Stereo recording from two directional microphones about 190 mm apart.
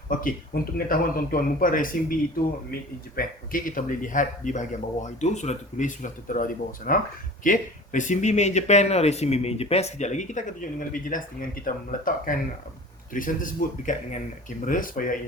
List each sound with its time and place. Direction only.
0.2 s speech: 45° left (ahead or behind)
3.2 s speech: 45° left (ahead or behind)